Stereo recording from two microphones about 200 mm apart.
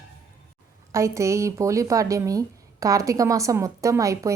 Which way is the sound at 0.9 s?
15° right (ahead or behind).